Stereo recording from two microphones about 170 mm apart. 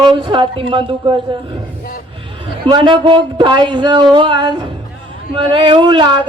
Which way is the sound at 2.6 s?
30° right (ahead or behind).